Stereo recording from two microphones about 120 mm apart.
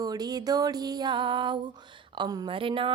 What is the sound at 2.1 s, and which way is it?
Speech, 35° right (ahead or behind).